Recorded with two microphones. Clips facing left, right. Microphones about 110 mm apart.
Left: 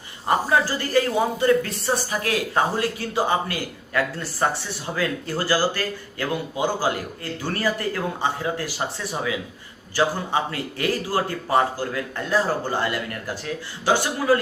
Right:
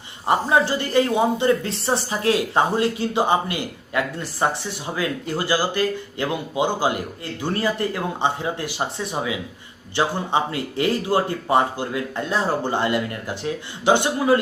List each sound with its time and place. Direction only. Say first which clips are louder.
0.3 s speech: right 2 dB; 25° right (ahead or behind)